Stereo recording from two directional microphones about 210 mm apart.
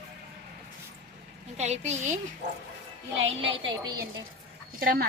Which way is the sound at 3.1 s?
65° right (ahead or behind).